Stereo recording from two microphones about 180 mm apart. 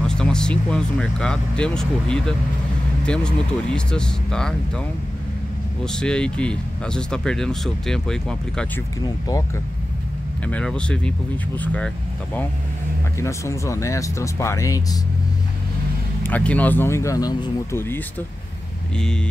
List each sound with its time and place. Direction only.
0.0 s speech: 5° left (ahead or behind)
5.9 s speech: 5° left (ahead or behind)
10.4 s speech: 5° left (ahead or behind)
13.2 s speech: 15° left (ahead or behind)
16.2 s speech: 10° left (ahead or behind)